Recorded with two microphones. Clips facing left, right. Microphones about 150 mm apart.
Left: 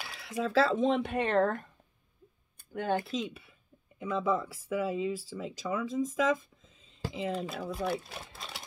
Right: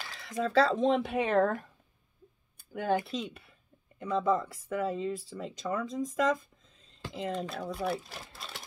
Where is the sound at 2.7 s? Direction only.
5° right (ahead or behind).